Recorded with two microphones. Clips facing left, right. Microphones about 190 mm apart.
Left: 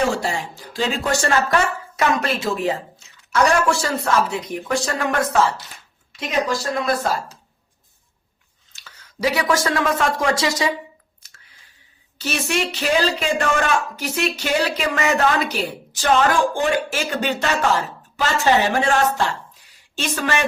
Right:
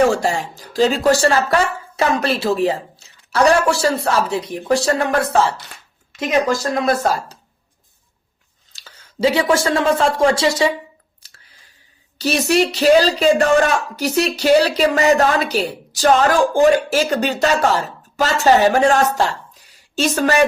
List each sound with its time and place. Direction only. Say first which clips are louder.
0.2 s speech: right 5 dB; 40° right (ahead or behind)
6.1 s speech: right 5 dB; 45° right (ahead or behind)
8.7 s speech: right 5 dB; 30° right (ahead or behind)
12.1 s speech: right 7 dB; 35° right (ahead or behind)